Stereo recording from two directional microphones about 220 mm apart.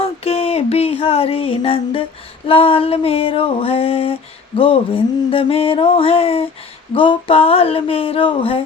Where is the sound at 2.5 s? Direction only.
25° left (ahead or behind).